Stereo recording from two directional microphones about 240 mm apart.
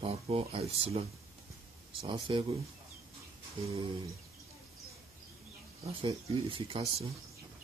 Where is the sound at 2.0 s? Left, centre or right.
Centre.